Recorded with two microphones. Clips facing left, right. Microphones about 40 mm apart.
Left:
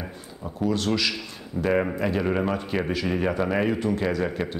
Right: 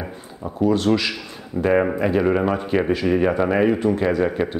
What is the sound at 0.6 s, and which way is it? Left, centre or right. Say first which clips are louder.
Speech: right 6 dB; centre.